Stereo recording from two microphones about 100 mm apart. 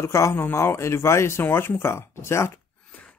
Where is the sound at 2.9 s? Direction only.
15° left (ahead or behind).